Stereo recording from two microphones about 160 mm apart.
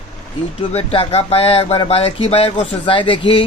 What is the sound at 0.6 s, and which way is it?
Speech, 35° left (ahead or behind).